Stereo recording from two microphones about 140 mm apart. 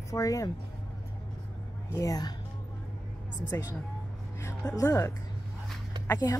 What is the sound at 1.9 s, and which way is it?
Speech, 25° left (ahead or behind).